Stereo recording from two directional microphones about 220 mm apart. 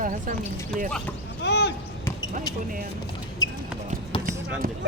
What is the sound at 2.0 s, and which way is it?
Basketball bounce, 15° left (ahead or behind).